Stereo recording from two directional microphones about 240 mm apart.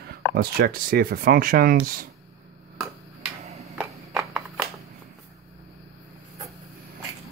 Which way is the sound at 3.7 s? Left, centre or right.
Centre.